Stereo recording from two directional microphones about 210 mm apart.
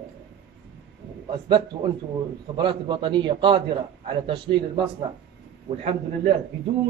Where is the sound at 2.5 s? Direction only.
20° right (ahead or behind).